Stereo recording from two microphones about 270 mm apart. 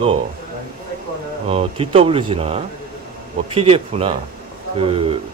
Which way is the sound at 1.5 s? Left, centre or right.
Right.